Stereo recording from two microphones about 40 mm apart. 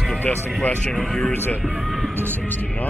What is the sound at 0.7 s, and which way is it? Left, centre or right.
Speech, left.